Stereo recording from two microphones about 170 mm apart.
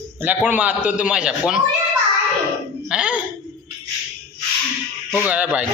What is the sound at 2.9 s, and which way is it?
Speech, 5° right (ahead or behind).